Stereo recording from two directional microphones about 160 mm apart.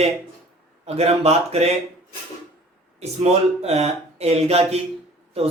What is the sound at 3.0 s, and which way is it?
Speech, 40° right (ahead or behind).